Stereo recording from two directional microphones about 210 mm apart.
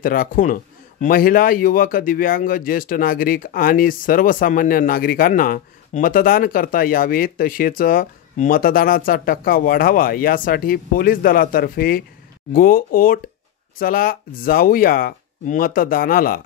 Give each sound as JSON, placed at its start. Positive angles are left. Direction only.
{"t": 0.0, "sound": "speech", "side_deg": 40}